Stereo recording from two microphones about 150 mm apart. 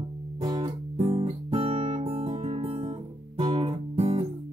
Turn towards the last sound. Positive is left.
turn(degrees=-40)  # may be behind; listen again after turning